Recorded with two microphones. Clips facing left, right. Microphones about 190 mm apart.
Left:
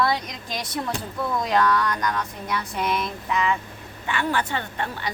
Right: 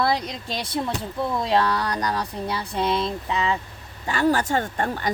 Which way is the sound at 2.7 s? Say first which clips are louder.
Right 5 dB; 30° right (ahead or behind).